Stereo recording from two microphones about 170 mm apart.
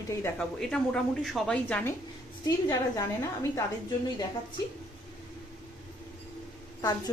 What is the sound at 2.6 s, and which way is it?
Speech, 20° left (ahead or behind).